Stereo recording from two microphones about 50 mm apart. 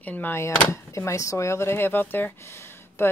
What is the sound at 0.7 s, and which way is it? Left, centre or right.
Speech, left.